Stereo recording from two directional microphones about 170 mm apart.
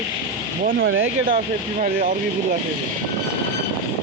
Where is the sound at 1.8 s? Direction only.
55° right (ahead or behind).